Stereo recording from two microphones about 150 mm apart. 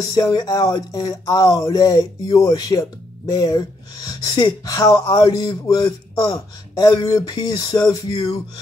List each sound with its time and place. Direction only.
0.1 s speech: 25° left (ahead or behind)